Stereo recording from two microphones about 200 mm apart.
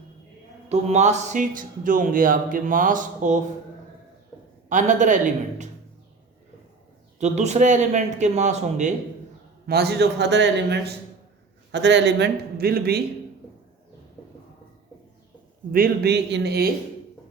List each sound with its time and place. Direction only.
0.7 s speech: 35° right (ahead or behind)
4.7 s speech: 40° right (ahead or behind)
7.2 s speech: 35° right (ahead or behind)
9.6 s a man's voice: 55° right (ahead or behind)
15.7 s a man's voice: 50° right (ahead or behind)